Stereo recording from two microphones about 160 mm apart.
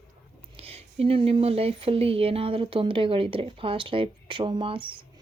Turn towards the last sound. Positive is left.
turn(degrees=-35)  # may be behind; listen again after turning